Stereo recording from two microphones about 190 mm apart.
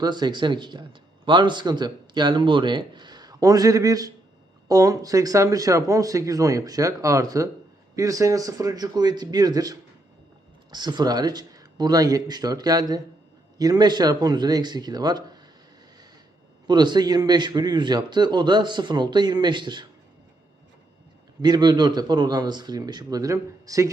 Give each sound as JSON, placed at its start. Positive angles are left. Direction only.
{"t": 0.0, "sound": "speech", "side_deg": -25}
{"t": 16.6, "sound": "speech", "side_deg": -25}
{"t": 21.4, "sound": "speech", "side_deg": -25}